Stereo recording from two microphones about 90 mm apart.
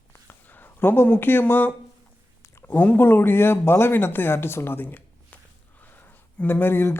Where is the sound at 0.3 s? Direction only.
20° left (ahead or behind).